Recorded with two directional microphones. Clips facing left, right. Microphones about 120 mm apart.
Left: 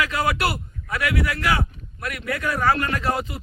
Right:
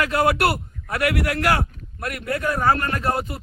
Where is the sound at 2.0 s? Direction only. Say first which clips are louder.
Right 2 dB; 45° right (ahead or behind).